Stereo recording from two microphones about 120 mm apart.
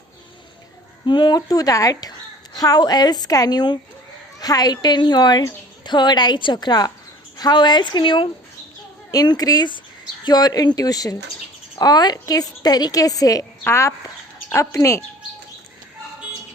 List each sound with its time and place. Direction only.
1.0 s a woman's voice: 40° left (ahead or behind)